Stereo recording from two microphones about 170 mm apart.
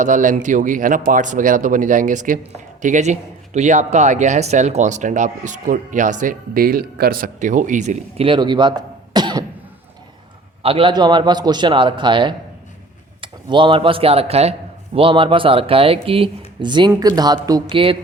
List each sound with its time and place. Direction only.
0.0 s a man's voice: 50° right (ahead or behind)
8.2 s a man's voice: 30° right (ahead or behind)
9.1 s cough: 25° right (ahead or behind)
10.6 s a man's voice: 35° right (ahead or behind)